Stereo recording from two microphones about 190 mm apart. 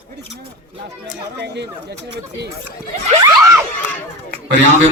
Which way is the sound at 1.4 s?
60° right (ahead or behind).